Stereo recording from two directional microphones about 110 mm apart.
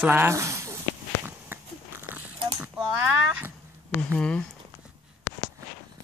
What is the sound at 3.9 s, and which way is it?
Speech, 10° left (ahead or behind).